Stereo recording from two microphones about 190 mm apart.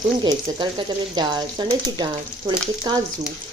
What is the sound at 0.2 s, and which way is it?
A woman's voice, 25° right (ahead or behind).